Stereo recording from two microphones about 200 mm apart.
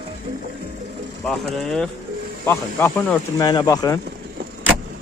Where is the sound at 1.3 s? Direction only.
Centre (ahead or behind); by 4.0 s 20° left (ahead or behind).